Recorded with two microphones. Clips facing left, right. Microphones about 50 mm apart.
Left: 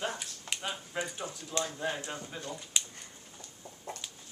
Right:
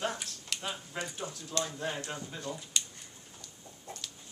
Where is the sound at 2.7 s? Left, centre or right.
Centre.